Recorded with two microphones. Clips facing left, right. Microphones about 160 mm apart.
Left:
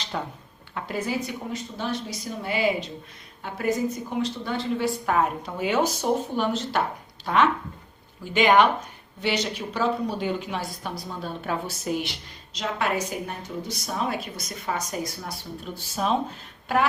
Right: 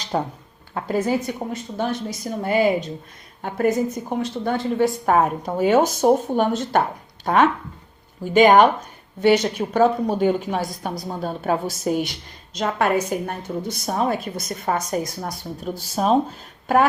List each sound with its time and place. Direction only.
0.1 s a woman's voice: 35° right (ahead or behind)
8.2 s a woman's voice: 45° right (ahead or behind)